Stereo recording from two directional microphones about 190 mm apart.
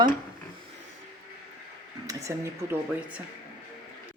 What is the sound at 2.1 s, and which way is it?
A woman's voice, 15° right (ahead or behind).